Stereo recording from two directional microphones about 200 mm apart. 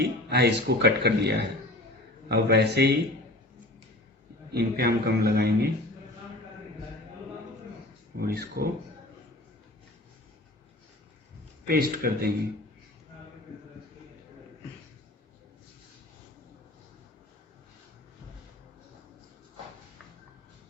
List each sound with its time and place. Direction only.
0.0 s speech: 55° right (ahead or behind)
4.5 s speech: 50° right (ahead or behind)
8.2 s speech: 50° right (ahead or behind)
11.6 s speech: 50° right (ahead or behind)